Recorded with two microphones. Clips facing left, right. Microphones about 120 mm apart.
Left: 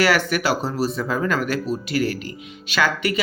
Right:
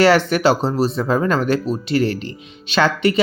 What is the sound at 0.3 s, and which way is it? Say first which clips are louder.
Speech: right 6 dB; 25° right (ahead or behind).